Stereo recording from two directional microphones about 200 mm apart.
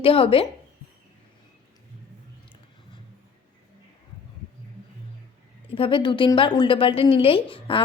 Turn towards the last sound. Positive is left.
turn(degrees=25)  # may be behind; listen again after turning